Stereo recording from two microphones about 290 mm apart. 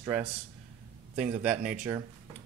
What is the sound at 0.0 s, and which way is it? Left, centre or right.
Speech, centre.